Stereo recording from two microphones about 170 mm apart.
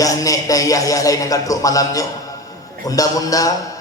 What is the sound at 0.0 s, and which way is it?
A man's voice, 20° left (ahead or behind).